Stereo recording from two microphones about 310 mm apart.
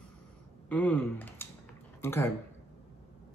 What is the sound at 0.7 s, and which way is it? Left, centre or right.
Speech, centre.